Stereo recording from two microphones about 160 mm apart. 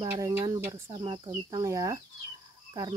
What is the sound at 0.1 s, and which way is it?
Speech, 20° right (ahead or behind).